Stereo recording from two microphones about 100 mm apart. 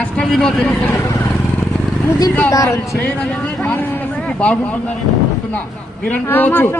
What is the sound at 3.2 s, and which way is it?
Speech, 5° left (ahead or behind).